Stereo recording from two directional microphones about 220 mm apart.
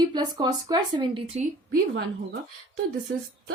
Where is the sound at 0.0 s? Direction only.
20° right (ahead or behind).